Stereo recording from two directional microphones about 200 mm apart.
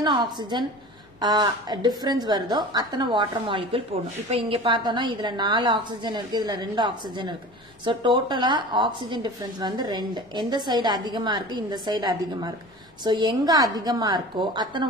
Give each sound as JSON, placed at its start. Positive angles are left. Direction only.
{"t": 0.0, "sound": "a woman's voice", "side_deg": -20}